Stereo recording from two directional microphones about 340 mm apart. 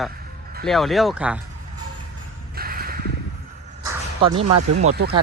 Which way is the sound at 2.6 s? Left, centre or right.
Right.